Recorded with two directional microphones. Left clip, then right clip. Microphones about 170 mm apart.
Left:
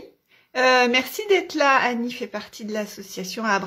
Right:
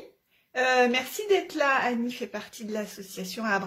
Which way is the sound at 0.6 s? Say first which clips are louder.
Left 5 dB; 25° left (ahead or behind).